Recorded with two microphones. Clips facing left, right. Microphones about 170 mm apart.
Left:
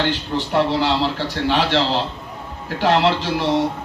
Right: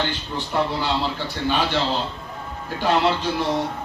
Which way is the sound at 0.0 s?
85° left.